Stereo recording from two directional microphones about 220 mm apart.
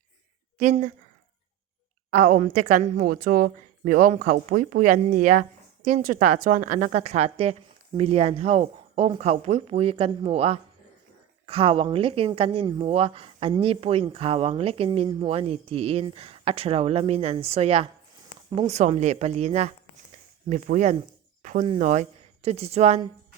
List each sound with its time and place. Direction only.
2.2 s a woman's voice: 35° right (ahead or behind)